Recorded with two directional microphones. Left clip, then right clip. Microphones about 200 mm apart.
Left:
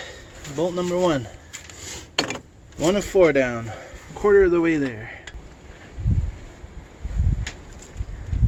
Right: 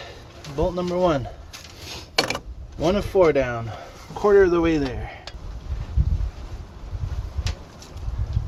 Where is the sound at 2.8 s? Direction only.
35° left (ahead or behind).